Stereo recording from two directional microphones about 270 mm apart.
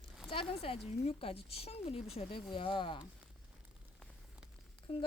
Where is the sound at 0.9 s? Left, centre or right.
Left.